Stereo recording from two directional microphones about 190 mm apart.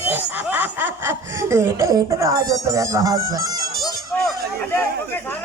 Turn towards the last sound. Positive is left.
turn(degrees=10)  # may be behind; listen again after turning